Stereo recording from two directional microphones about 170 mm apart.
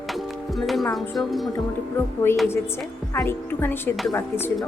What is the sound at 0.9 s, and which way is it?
Speech, centre (ahead or behind).